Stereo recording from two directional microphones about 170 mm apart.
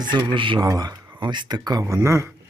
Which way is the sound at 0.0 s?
25° right (ahead or behind).